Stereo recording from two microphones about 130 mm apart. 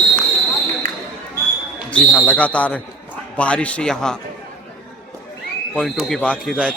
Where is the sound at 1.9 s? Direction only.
10° left (ahead or behind).